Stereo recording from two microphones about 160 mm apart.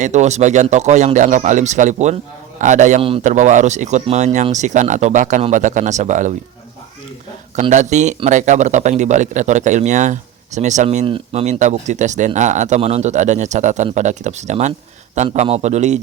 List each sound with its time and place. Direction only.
0.0 s speech: 45° right (ahead or behind)
7.5 s speech: 50° right (ahead or behind)
11.0 s speech: 35° right (ahead or behind)